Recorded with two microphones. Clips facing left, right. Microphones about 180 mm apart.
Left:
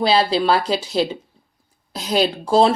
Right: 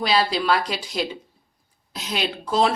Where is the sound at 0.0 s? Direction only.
30° left (ahead or behind).